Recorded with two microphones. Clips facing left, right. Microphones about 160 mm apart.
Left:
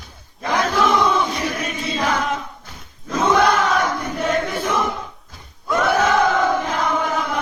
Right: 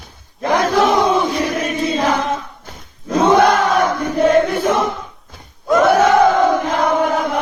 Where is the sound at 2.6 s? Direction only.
50° right (ahead or behind).